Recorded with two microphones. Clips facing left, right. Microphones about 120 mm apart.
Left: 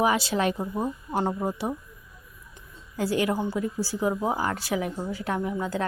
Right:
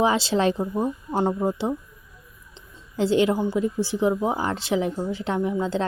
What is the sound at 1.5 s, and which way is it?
Speech, 25° right (ahead or behind).